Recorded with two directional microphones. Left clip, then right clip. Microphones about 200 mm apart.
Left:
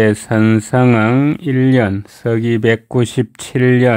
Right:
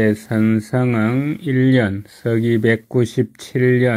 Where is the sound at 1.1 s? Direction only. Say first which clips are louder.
Left 7 dB; 35° left (ahead or behind).